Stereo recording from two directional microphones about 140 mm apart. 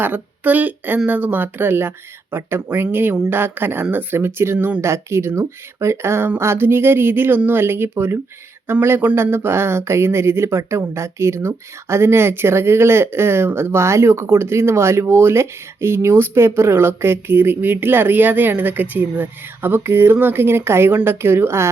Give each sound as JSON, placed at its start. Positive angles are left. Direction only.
{"t": 0.0, "sound": "speech", "side_deg": -15}